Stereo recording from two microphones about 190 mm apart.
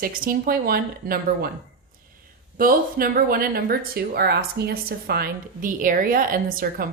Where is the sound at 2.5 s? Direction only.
50° right (ahead or behind).